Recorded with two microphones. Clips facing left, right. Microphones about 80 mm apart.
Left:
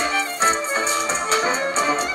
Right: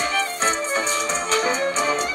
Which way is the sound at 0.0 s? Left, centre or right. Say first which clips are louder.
Left 2 dB; left.